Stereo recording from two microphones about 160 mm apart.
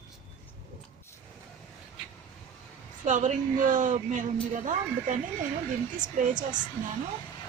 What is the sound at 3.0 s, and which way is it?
A woman's voice, 50° right (ahead or behind).